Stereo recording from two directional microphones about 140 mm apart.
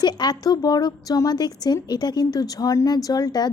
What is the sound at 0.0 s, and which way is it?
A woman's voice, 30° left (ahead or behind).